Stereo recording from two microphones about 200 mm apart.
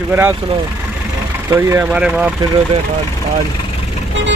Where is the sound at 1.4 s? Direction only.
10° right (ahead or behind).